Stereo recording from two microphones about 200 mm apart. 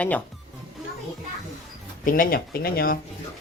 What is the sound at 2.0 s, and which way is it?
Speech, 45° left (ahead or behind).